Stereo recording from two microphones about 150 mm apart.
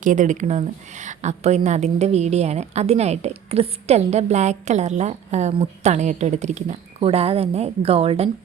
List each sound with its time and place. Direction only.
0.0 s a woman's voice: 55° right (ahead or behind); by 8.3 s 40° right (ahead or behind)